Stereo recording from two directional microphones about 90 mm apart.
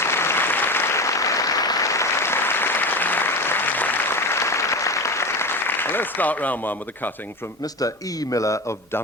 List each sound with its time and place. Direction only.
0.0 s applause: 30° left (ahead or behind)
7.8 s a man's voice: 40° left (ahead or behind)